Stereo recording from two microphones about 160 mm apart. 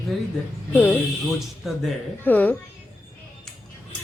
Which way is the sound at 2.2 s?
10° left (ahead or behind).